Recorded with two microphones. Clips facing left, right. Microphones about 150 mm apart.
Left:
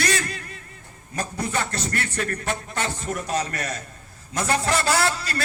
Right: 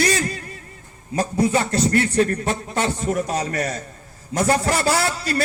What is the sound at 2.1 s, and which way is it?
Speech, 40° right (ahead or behind).